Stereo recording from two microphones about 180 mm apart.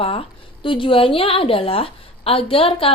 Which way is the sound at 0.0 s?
30° left (ahead or behind).